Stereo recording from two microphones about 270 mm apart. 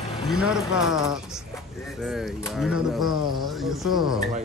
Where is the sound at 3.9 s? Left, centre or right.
Centre.